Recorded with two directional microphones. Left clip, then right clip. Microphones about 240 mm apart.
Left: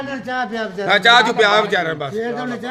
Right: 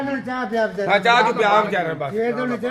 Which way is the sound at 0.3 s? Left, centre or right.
Left.